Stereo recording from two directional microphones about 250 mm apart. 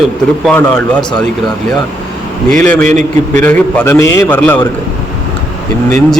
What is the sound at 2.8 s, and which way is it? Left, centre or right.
Speech, right.